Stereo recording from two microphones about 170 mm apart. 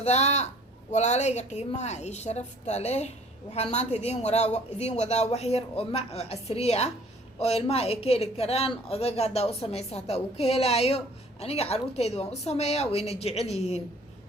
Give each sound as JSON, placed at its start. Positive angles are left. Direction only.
{"t": 0.0, "sound": "speech", "side_deg": 40}